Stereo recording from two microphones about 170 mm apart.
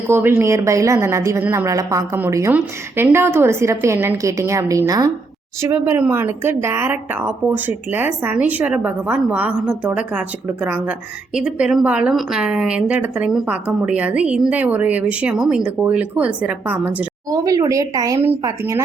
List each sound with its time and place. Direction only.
0.1 s a woman's voice: 15° right (ahead or behind)
17.2 s speech: 20° right (ahead or behind)